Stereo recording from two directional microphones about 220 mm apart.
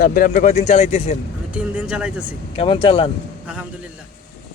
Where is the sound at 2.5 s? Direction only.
25° left (ahead or behind).